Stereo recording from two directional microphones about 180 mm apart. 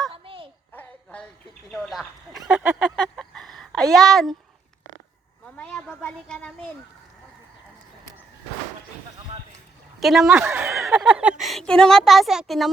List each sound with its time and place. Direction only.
0.1 s a sound: 30° right (ahead or behind)
0.7 s music: 10° left (ahead or behind)
1.7 s speech: centre (ahead or behind)
2.5 s a sound: 5° right (ahead or behind)
5.5 s speech: 5° left (ahead or behind)
10.0 s a woman's voice: centre (ahead or behind)